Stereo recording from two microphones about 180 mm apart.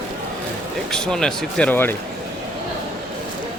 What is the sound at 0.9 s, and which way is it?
Speech, 5° left (ahead or behind).